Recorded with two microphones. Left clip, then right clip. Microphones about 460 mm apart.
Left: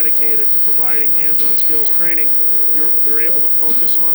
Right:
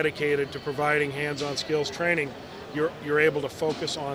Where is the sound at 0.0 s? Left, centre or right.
Right.